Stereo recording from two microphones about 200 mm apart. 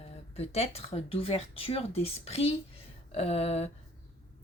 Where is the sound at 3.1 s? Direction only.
30° left (ahead or behind).